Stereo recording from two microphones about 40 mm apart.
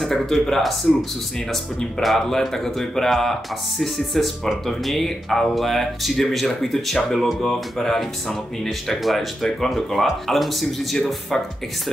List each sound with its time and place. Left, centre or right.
0.0 s speech: centre
2.0 s speech: centre